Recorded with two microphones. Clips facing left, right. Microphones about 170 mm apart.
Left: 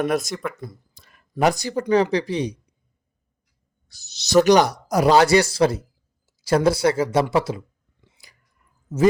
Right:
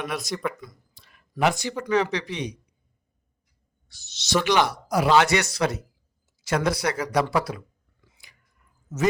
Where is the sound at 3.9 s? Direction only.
40° left (ahead or behind).